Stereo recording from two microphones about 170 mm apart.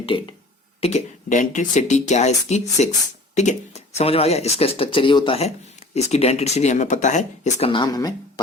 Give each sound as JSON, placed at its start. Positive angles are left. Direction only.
{"t": 0.0, "sound": "speech", "side_deg": 30}
{"t": 0.8, "sound": "speech", "side_deg": 40}
{"t": 7.7, "sound": "speech", "side_deg": 25}